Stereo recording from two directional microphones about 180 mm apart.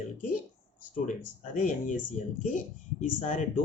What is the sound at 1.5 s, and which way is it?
Speech, 45° left (ahead or behind).